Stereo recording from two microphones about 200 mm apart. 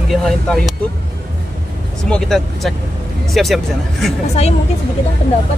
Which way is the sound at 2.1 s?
Centre (ahead or behind).